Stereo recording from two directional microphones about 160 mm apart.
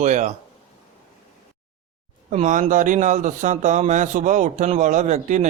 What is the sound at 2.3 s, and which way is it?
A man's voice, 50° right (ahead or behind).